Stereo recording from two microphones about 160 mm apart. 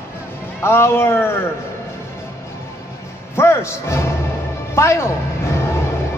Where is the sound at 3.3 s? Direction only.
15° left (ahead or behind).